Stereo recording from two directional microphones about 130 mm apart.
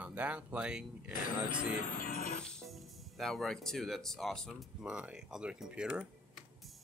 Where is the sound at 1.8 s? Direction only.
85° left.